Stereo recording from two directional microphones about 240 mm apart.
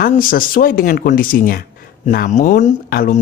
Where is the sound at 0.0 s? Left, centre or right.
Left.